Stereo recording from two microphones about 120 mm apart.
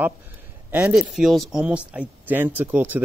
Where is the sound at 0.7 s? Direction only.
10° right (ahead or behind).